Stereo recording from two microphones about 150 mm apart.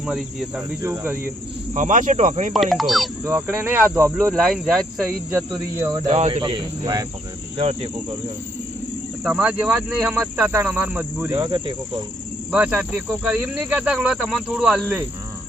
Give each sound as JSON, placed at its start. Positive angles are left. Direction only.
{"t": 0.0, "sound": "cricket", "side_deg": 0}
{"t": 0.8, "sound": "speech", "side_deg": -15}
{"t": 1.7, "sound": "speech", "side_deg": -60}
{"t": 2.5, "sound": "cricket", "side_deg": 0}
{"t": 3.2, "sound": "speech", "side_deg": -15}
{"t": 4.4, "sound": "cricket", "side_deg": 0}
{"t": 5.5, "sound": "insect", "side_deg": -20}
{"t": 6.1, "sound": "speech", "side_deg": -45}
{"t": 6.4, "sound": "speech", "side_deg": -30}
{"t": 7.6, "sound": "speech", "side_deg": -40}
{"t": 9.2, "sound": "speech", "side_deg": -10}
{"t": 11.3, "sound": "insect", "side_deg": -25}
{"t": 12.5, "sound": "speech", "side_deg": -10}